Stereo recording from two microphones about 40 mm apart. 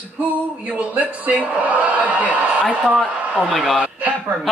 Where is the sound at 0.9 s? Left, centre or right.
Right.